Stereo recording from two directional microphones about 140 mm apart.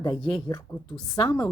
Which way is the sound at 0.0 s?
30° left (ahead or behind).